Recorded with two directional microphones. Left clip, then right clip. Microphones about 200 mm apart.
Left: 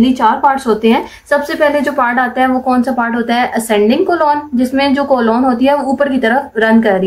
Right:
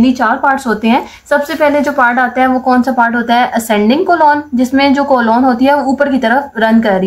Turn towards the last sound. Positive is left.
turn(degrees=-20)  # may be behind; listen again after turning